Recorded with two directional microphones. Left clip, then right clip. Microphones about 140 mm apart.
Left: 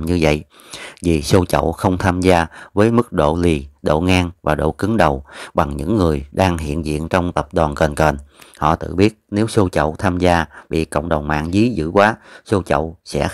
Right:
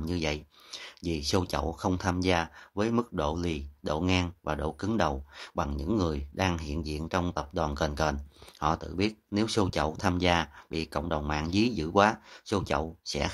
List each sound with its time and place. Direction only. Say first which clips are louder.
0.0 s speech: left 15 dB; 55° left (ahead or behind)